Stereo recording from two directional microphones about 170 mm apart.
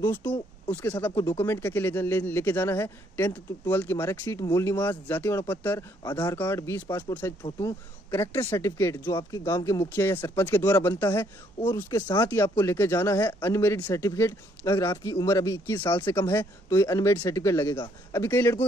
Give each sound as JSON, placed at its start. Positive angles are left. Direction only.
{"t": 0.2, "sound": "speech", "side_deg": 10}